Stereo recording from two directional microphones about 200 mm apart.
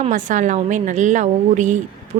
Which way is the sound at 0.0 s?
40° right (ahead or behind).